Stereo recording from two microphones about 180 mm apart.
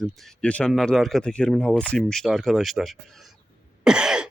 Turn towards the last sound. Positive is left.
turn(degrees=-5)  # may be behind; listen again after turning